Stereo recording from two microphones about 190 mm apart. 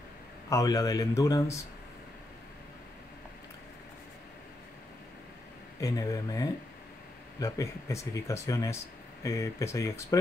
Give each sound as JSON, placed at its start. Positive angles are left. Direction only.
{"t": 0.5, "sound": "a man's voice", "side_deg": 15}
{"t": 5.8, "sound": "a man's voice", "side_deg": 15}